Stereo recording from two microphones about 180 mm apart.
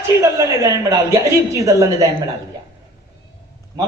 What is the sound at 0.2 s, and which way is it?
A woman's voice, 15° right (ahead or behind).